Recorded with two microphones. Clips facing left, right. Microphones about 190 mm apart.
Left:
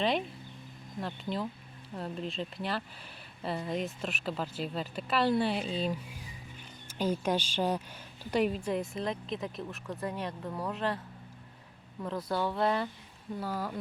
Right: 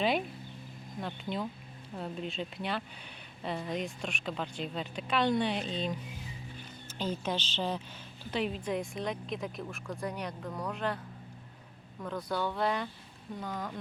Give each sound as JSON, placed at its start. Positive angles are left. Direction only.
{"t": 0.0, "sound": "speech", "side_deg": -5}
{"t": 12.5, "sound": "speech", "side_deg": 5}